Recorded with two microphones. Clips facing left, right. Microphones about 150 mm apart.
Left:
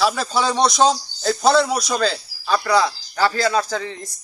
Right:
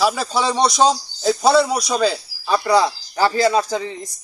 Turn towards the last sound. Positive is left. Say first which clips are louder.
# right 3 dB
turn(degrees=-20)  # may be behind; listen again after turning